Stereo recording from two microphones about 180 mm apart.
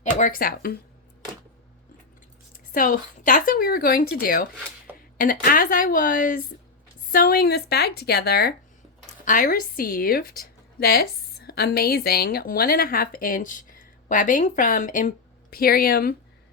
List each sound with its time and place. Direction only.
0.1 s speech: 45° left (ahead or behind)
2.7 s speech: 50° left (ahead or behind)
9.2 s a woman's voice: 50° left (ahead or behind)